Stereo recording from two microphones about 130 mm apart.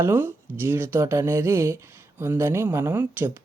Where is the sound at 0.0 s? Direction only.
15° right (ahead or behind).